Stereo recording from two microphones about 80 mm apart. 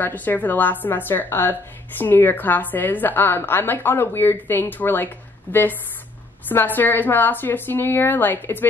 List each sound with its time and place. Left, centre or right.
0.0 s a woman's voice: left